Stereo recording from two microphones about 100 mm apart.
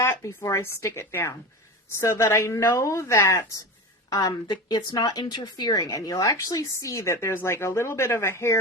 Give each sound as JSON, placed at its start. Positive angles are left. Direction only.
{"t": 0.0, "sound": "a woman's voice", "side_deg": 25}
{"t": 4.1, "sound": "a woman's voice", "side_deg": 40}